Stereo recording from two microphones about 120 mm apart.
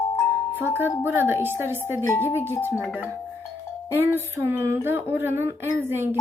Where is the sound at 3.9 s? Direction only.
20° right (ahead or behind).